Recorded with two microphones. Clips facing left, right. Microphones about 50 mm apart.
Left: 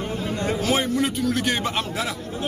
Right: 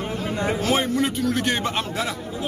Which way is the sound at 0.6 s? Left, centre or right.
Centre.